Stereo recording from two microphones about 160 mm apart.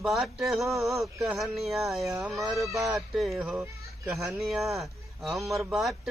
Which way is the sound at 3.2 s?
5° right (ahead or behind).